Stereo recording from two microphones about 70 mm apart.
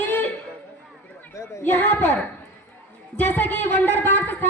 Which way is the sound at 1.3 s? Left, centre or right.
Left.